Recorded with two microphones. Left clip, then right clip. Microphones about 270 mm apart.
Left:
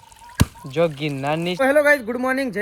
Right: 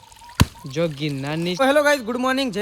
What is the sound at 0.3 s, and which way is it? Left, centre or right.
Speech, centre.